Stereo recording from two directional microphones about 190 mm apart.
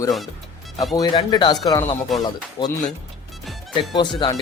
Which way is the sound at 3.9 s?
25° left (ahead or behind).